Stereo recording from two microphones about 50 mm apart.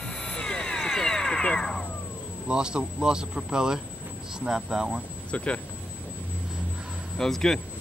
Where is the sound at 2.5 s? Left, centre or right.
Centre.